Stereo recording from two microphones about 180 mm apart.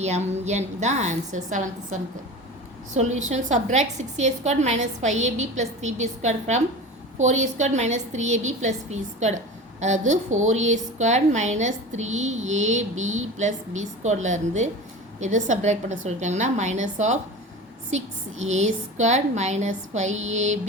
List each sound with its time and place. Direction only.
0.0 s a woman's voice: 40° right (ahead or behind)